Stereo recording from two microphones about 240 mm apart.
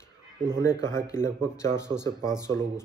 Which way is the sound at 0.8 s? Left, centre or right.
Centre.